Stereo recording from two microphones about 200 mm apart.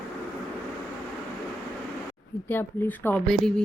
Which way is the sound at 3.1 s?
5° left (ahead or behind).